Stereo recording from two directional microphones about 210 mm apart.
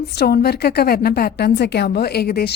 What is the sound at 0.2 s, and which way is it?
A woman's voice, 50° left (ahead or behind).